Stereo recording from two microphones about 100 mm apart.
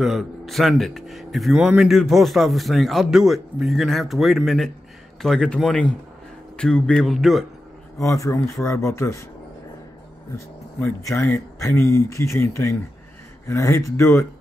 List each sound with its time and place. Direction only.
0.0 s a man's voice: centre (ahead or behind)
8.0 s speech: 30° left (ahead or behind)
10.3 s speech: 30° left (ahead or behind)